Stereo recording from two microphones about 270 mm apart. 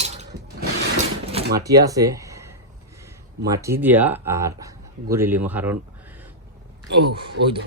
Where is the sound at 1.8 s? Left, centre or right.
Centre.